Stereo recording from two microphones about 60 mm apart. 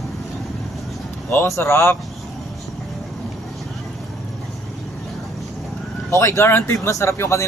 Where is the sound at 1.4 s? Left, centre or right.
Left.